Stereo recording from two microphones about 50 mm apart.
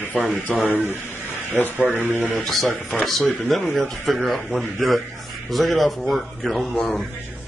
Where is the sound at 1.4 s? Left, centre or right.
Left.